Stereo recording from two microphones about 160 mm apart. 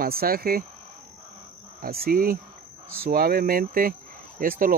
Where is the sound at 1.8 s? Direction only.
70° right (ahead or behind).